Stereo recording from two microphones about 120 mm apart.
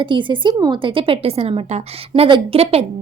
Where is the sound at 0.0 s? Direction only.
45° right (ahead or behind).